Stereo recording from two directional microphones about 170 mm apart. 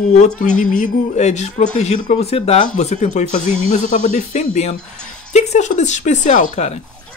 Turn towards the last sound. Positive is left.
turn(degrees=45)  # may be behind; listen again after turning